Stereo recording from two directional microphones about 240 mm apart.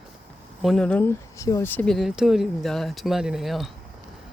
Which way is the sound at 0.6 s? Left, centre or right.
Centre.